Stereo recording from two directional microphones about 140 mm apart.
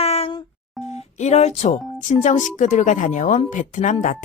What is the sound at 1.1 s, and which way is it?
Speech, 55° left (ahead or behind).